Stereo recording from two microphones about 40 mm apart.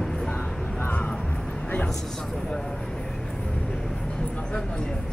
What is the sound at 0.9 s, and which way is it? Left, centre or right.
Music, left.